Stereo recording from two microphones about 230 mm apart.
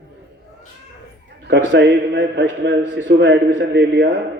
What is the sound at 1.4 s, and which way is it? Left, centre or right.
A man's voice, right.